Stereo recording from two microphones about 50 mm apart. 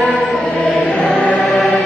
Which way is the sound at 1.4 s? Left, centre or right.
Centre.